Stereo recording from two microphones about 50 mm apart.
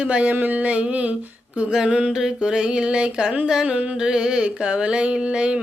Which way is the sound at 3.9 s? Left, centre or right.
Centre.